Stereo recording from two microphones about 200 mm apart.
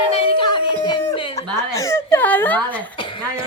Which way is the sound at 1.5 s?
15° left (ahead or behind).